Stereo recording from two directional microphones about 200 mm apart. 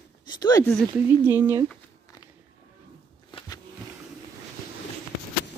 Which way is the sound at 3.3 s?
20° left (ahead or behind).